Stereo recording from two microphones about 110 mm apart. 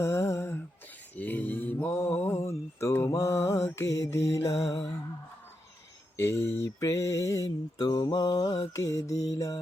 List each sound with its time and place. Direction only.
0.0 s a sound: 25° left (ahead or behind)
1.1 s mantra: 15° left (ahead or behind)
6.1 s mantra: 20° left (ahead or behind)
8.7 s music: 30° left (ahead or behind)